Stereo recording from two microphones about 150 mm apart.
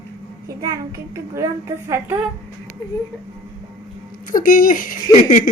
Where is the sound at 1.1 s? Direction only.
20° right (ahead or behind).